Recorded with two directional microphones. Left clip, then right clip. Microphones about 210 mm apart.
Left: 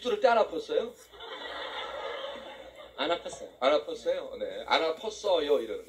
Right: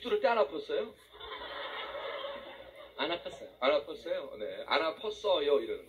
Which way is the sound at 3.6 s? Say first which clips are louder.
Left 4 dB; 50° left (ahead or behind).